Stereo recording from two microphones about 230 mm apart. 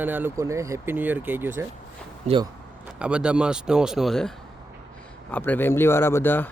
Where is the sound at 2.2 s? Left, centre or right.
Right.